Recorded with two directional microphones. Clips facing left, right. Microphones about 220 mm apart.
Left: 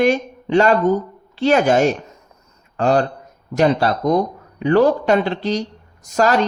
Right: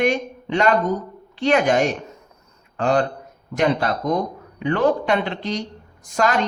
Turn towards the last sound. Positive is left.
turn(degrees=40)  # may be behind; listen again after turning